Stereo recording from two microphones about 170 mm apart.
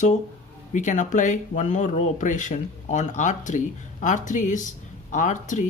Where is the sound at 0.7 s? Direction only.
45° left (ahead or behind).